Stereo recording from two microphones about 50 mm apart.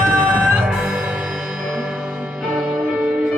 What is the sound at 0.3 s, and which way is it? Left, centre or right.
Music, right.